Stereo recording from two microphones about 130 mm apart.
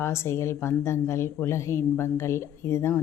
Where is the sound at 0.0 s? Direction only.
20° left (ahead or behind).